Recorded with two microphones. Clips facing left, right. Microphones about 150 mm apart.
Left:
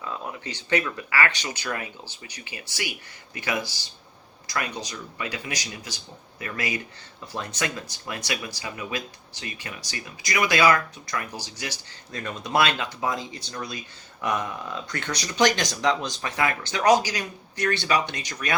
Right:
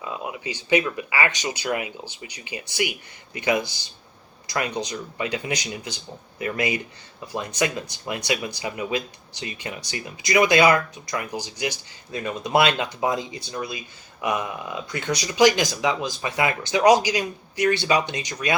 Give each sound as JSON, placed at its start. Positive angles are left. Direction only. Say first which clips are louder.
{"t": 0.0, "sound": "speech", "louder": "right 2 dB", "side_deg": -15}